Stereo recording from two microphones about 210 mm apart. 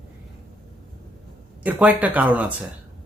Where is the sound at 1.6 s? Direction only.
5° right (ahead or behind).